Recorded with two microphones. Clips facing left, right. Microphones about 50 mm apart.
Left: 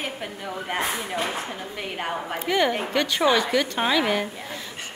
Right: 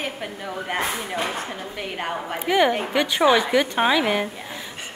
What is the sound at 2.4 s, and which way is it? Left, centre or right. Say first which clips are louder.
A woman's voice: right 4 dB; centre.